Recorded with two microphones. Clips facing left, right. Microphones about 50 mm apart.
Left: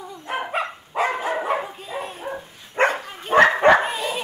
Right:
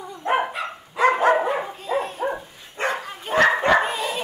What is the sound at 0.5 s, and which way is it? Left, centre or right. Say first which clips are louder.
Dog: left 4 dB; left.